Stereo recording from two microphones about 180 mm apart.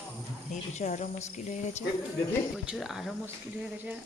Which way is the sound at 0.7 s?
40° left (ahead or behind).